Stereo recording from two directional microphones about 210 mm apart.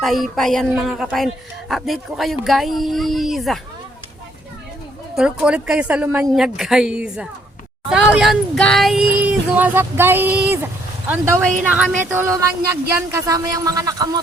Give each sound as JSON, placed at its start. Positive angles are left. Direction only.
{"t": 0.0, "sound": "speech", "side_deg": 0}
{"t": 5.1, "sound": "speech", "side_deg": -5}